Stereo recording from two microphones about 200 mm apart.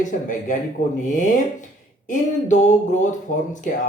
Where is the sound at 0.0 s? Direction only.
40° left (ahead or behind).